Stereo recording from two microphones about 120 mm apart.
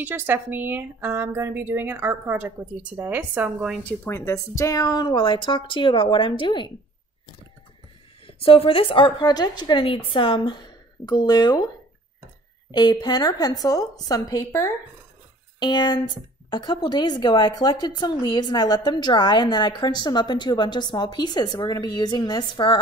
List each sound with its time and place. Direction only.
0.0 s speech: 15° right (ahead or behind)
4.0 s speech: 20° left (ahead or behind); by 6.7 s 45° left (ahead or behind)
8.3 s speech: 50° left (ahead or behind); by 11.6 s 35° left (ahead or behind)
12.7 s speech: 40° left (ahead or behind)
15.6 s speech: 35° left (ahead or behind)